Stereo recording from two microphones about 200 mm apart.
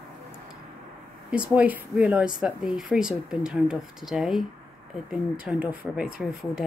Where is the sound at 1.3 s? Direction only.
5° right (ahead or behind).